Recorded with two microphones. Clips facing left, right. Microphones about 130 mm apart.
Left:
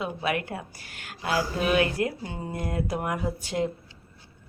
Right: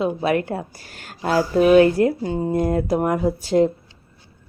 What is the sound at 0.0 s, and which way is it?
Speech, 35° right (ahead or behind).